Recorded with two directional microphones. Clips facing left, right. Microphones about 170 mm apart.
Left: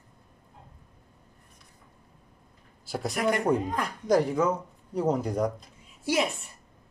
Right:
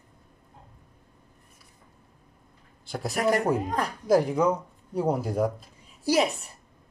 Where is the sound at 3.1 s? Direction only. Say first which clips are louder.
Right 3 dB; 40° right (ahead or behind).